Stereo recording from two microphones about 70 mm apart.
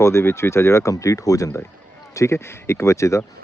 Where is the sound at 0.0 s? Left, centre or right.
Left.